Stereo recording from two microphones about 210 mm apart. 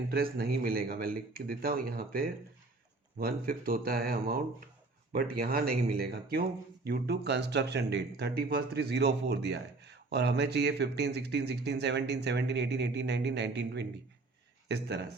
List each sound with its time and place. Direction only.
0.1 s speech: 45° right (ahead or behind)